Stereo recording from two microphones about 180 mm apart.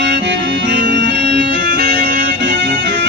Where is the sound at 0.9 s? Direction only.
75° right (ahead or behind).